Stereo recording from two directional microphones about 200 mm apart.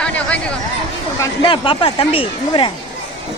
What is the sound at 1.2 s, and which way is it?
Speech, 25° left (ahead or behind).